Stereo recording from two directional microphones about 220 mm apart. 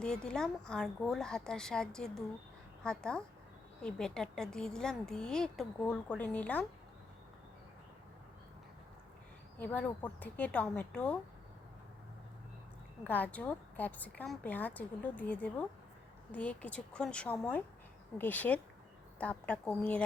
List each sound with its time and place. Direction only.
0.0 s a woman's voice: 5° left (ahead or behind)
9.6 s a woman's voice: 5° left (ahead or behind)
13.1 s a woman's voice: 5° left (ahead or behind)